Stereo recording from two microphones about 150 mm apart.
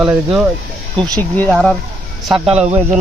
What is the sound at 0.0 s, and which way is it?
Speech, 10° right (ahead or behind).